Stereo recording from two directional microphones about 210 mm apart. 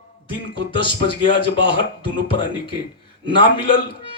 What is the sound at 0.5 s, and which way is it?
Speech, 25° left (ahead or behind).